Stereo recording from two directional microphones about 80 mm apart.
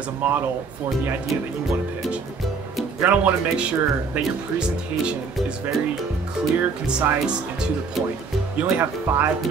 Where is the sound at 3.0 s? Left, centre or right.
Right.